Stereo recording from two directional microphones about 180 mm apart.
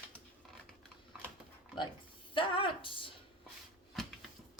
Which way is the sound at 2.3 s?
30° left (ahead or behind).